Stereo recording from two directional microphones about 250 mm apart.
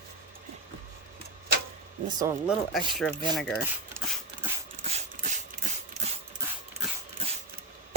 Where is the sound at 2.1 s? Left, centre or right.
Centre.